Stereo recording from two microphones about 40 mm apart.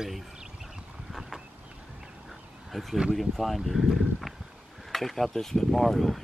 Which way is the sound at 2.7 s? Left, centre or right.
Centre.